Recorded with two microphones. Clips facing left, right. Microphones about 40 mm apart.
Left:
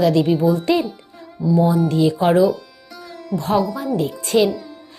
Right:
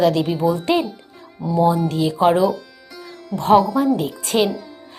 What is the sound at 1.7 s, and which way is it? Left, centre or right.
Speech, centre.